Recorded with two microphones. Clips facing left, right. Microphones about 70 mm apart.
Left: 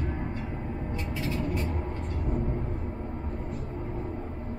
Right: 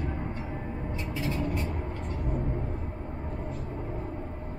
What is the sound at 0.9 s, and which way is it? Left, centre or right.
Vehicle, centre.